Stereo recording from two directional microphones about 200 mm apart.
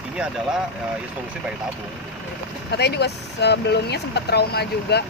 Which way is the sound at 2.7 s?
55° left (ahead or behind).